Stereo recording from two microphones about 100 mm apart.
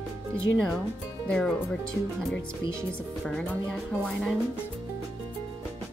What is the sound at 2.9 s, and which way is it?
Speech, 10° left (ahead or behind).